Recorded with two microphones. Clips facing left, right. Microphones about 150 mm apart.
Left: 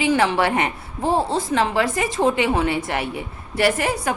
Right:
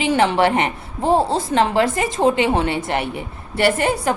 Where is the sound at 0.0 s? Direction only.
25° right (ahead or behind).